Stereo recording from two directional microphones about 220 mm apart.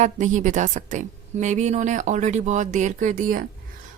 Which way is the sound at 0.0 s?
35° right (ahead or behind).